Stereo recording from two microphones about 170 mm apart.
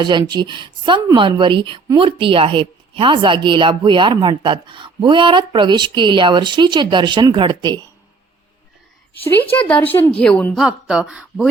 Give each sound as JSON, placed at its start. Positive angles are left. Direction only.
{"t": 0.0, "sound": "a woman's voice", "side_deg": -25}
{"t": 9.2, "sound": "a woman's voice", "side_deg": 10}